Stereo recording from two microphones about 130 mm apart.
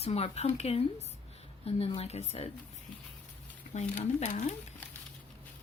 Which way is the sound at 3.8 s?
60° left (ahead or behind).